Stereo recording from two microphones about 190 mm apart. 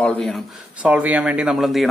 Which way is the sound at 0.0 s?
5° left (ahead or behind).